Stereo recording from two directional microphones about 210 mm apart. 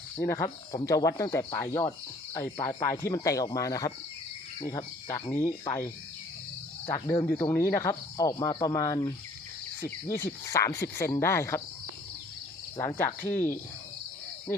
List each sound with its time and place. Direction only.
0.2 s speech: 15° left (ahead or behind)
10.2 s speech: 15° left (ahead or behind)
12.7 s speech: 10° left (ahead or behind)